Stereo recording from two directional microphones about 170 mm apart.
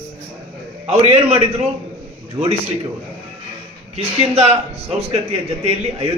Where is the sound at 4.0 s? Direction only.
35° right (ahead or behind).